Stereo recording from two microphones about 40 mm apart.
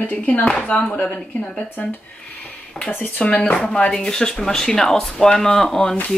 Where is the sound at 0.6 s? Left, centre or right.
Left.